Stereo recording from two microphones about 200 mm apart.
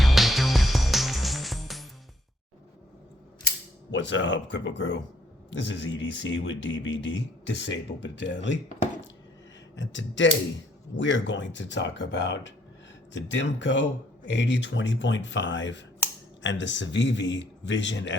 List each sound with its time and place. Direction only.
0.0 s music: centre (ahead or behind)
3.9 s speech: 65° left (ahead or behind)
9.7 s speech: 65° left (ahead or behind)